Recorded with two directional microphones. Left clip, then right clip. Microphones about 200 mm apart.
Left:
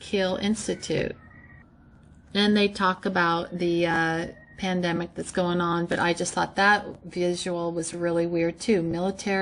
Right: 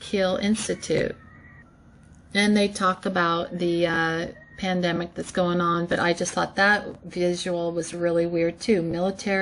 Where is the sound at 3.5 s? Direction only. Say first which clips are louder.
Right 1 dB; 40° left (ahead or behind).